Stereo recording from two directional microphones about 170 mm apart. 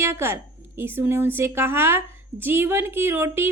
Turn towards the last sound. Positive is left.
turn(degrees=-15)  # may be behind; listen again after turning